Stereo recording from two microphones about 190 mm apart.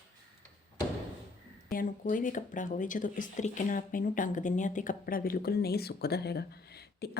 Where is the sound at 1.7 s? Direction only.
45° left (ahead or behind).